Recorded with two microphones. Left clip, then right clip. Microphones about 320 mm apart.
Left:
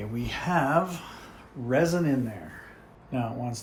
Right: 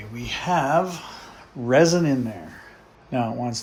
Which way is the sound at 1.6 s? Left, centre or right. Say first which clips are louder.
Right 7 dB; right.